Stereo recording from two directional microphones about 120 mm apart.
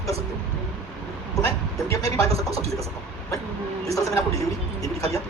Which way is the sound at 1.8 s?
25° left (ahead or behind).